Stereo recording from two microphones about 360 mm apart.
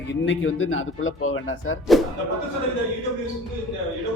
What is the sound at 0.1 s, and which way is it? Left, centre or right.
Speech, left.